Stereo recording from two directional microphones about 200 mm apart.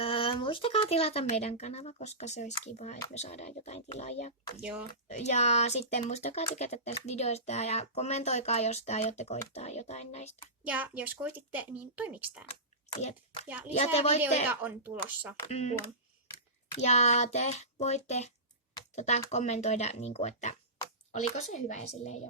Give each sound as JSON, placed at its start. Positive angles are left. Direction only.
{"t": 0.0, "sound": "speech", "side_deg": 25}
{"t": 10.6, "sound": "speech", "side_deg": -5}
{"t": 12.5, "sound": "speech", "side_deg": 30}
{"t": 14.5, "sound": "speech", "side_deg": -10}
{"t": 15.4, "sound": "speech", "side_deg": 35}
{"t": 16.7, "sound": "speech", "side_deg": 35}